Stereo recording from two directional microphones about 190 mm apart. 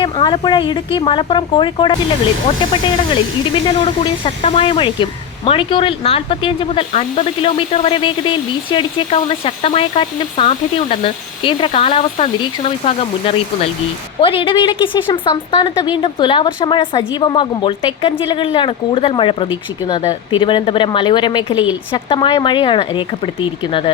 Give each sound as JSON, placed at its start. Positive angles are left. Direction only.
{"t": 0.0, "sound": "speech", "side_deg": 25}
{"t": 3.5, "sound": "speech", "side_deg": 25}